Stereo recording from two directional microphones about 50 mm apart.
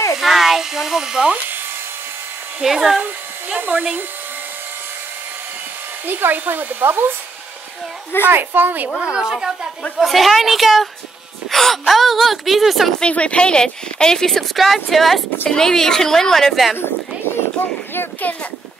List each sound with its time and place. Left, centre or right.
0.2 s electric shaver: centre
2.6 s speech: centre
3.0 s speech: right
6.0 s speech: right
8.3 s speech: right
9.0 s a woman's voice: centre
9.9 s speech: centre
13.0 s speech: left; by 16.7 s centre
18.3 s speech: left